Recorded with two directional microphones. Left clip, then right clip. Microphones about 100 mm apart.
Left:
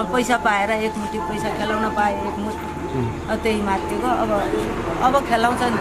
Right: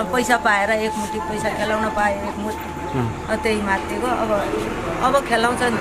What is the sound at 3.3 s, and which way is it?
Speech, centre (ahead or behind).